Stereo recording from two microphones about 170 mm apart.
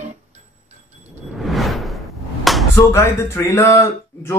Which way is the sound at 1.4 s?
Centre (ahead or behind).